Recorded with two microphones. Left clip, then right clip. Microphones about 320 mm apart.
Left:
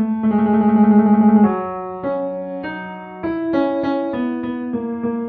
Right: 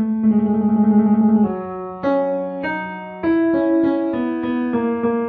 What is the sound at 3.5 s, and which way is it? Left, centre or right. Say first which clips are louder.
Music: right 1 dB; left.